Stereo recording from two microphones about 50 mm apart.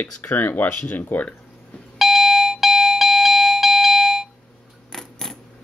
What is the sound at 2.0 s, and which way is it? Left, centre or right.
Alarm, centre.